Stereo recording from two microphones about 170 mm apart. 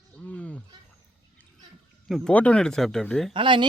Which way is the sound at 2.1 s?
5° left (ahead or behind).